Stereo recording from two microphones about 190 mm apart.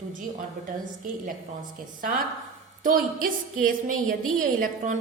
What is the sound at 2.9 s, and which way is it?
A woman's voice, 50° right (ahead or behind).